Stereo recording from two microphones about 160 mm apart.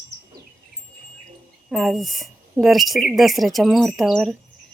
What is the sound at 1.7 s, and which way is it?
Speech, centre (ahead or behind).